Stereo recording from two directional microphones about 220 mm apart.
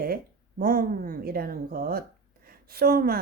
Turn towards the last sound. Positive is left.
turn(degrees=-45)  # may be behind; listen again after turning